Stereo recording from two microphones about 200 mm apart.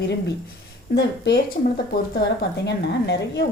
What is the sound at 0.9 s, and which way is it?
A woman's voice, 55° left (ahead or behind).